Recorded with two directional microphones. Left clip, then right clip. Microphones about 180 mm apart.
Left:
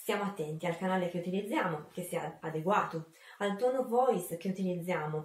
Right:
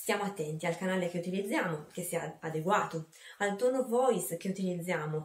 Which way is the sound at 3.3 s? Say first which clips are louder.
Right 2 dB; 20° right (ahead or behind).